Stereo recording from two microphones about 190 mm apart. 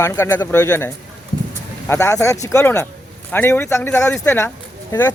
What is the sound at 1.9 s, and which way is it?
Speech, 15° left (ahead or behind).